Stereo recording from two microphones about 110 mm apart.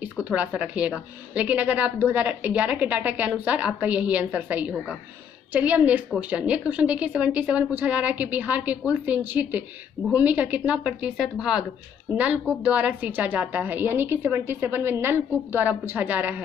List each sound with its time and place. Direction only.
0.0 s a woman's voice: 10° right (ahead or behind)